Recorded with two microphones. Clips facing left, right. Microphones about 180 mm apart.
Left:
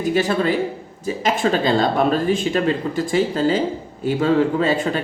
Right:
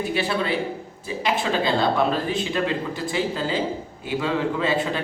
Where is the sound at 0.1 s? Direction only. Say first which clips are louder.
Left 9 dB; 45° left (ahead or behind).